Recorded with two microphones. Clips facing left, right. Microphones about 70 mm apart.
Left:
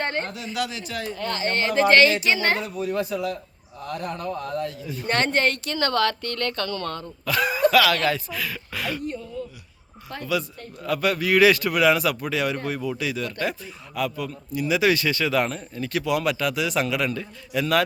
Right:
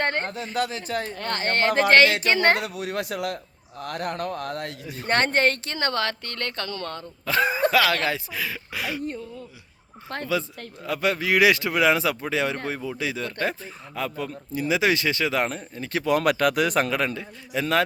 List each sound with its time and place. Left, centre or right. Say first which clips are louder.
0.0 s speech: right 1 dB; right
2.6 s speech: left 2 dB; right
4.9 s speech: right 1 dB; right; by 9.0 s centre
10.1 s speech: right 3 dB; right
10.8 s speech: left 1 dB; right
17.2 s speech: left 2 dB; right